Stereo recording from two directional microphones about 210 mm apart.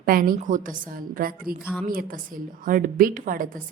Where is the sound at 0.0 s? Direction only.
45° right (ahead or behind).